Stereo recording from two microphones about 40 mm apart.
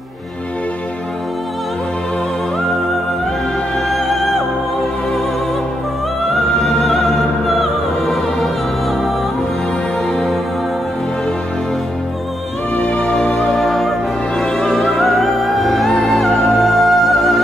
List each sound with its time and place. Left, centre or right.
3.9 s music: centre
6.3 s music: centre
12.7 s music: left
13.1 s music: centre